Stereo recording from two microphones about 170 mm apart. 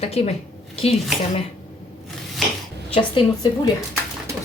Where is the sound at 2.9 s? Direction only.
25° left (ahead or behind).